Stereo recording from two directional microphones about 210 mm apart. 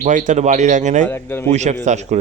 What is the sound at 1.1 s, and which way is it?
Speech, 10° left (ahead or behind).